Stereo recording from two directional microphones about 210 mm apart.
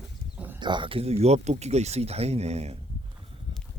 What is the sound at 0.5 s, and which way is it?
A man's voice, 20° right (ahead or behind).